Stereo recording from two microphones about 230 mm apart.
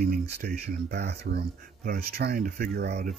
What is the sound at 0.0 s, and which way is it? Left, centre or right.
Speech, right.